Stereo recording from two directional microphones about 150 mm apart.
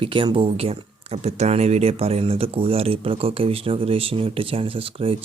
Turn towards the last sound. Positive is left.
turn(degrees=-40)  # may be behind; listen again after turning